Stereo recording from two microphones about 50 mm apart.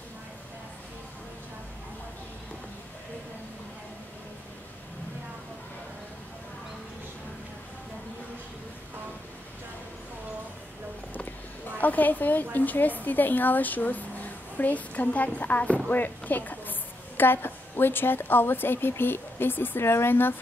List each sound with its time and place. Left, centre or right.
11.8 s a woman's voice: left